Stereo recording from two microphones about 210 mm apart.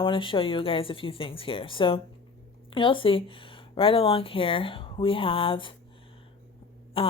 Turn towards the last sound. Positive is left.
turn(degrees=25)  # may be behind; listen again after turning